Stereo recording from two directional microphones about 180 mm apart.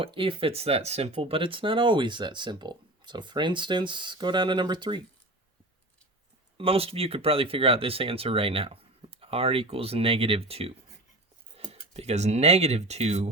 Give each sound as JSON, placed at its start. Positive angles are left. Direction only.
{"t": 0.0, "sound": "speech", "side_deg": -30}
{"t": 6.6, "sound": "speech", "side_deg": -30}